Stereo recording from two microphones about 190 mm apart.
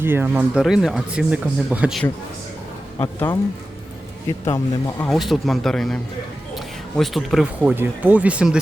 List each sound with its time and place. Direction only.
0.0 s speech: 10° right (ahead or behind)
3.0 s speech: 15° left (ahead or behind)
4.4 s speech: 15° left (ahead or behind)
5.0 s speech: centre (ahead or behind)